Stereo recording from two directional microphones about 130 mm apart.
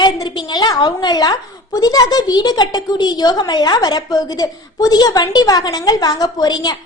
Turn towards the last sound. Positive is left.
turn(degrees=30)  # may be behind; listen again after turning